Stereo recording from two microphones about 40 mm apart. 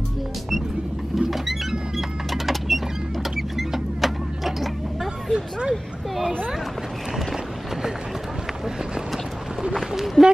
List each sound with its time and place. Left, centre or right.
1.1 s rodents: centre
3.3 s vehicle: centre
5.3 s vehicle: right
9.8 s speech: centre